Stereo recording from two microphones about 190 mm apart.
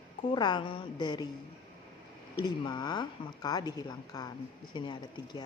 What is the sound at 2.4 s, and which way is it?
A woman's voice, 20° left (ahead or behind).